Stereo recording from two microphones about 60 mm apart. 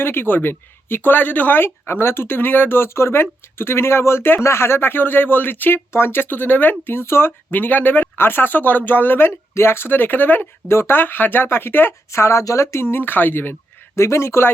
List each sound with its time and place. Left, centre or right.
0.0 s speech: left
10.7 s speech: left
12.1 s speech: left
13.9 s speech: left